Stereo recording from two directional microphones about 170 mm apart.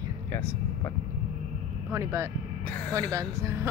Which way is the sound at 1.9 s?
15° right (ahead or behind).